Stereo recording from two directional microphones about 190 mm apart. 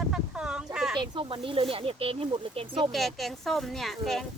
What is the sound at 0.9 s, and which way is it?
Speech, 25° right (ahead or behind).